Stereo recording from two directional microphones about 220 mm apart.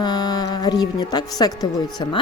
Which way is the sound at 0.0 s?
20° left (ahead or behind).